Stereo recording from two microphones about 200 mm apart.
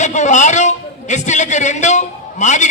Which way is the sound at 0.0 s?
35° left (ahead or behind).